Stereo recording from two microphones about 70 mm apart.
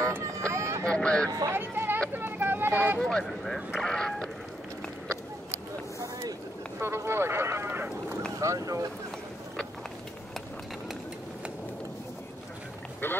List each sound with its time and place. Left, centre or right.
0.4 s a sound: right
0.8 s honk: centre
1.5 s vehicle: right
3.0 s speech: centre
6.8 s speech: right
8.4 s speech: right
13.0 s speech: left